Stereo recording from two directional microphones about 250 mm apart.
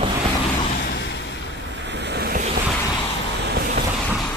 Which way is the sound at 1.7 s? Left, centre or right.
Right.